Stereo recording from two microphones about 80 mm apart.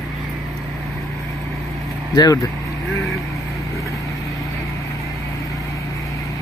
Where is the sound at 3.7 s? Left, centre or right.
Left.